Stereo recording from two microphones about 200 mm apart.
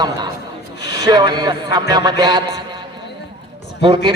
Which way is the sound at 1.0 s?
20° right (ahead or behind).